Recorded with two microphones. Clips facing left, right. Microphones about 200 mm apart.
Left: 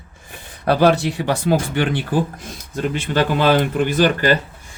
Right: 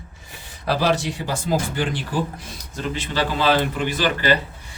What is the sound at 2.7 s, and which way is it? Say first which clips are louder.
Speech: left 6 dB; 55° left (ahead or behind).